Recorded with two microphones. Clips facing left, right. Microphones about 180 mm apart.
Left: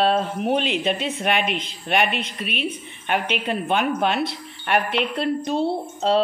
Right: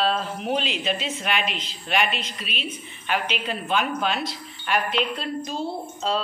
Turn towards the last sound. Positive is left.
turn(degrees=65)  # may be behind; listen again after turning